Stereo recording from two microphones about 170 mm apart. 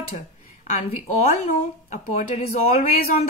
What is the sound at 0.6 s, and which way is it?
A woman's voice, 40° left (ahead or behind).